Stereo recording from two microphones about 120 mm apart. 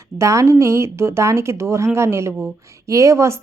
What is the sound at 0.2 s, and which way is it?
Speech, 25° right (ahead or behind).